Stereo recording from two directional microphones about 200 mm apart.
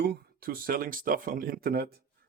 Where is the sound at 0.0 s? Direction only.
50° right (ahead or behind).